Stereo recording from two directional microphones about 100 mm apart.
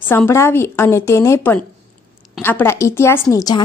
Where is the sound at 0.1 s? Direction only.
25° left (ahead or behind).